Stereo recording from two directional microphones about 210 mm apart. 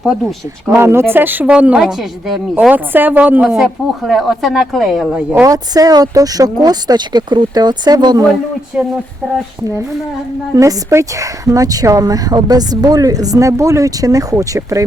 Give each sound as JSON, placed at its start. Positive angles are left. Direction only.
{"t": 0.0, "sound": "a woman's voice", "side_deg": 0}
{"t": 5.3, "sound": "speech", "side_deg": -15}
{"t": 10.5, "sound": "speech", "side_deg": -15}